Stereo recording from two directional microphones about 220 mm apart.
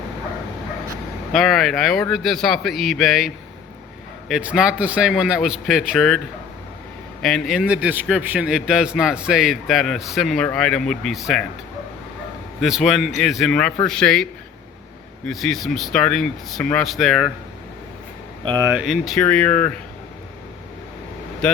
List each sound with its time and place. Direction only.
1.3 s a man's voice: centre (ahead or behind)
7.2 s a man's voice: centre (ahead or behind)
12.6 s a man's voice: centre (ahead or behind)
15.3 s a man's voice: centre (ahead or behind)
18.4 s speech: 20° right (ahead or behind)
18.7 s a man's voice: centre (ahead or behind)
21.4 s a man's voice: 5° left (ahead or behind)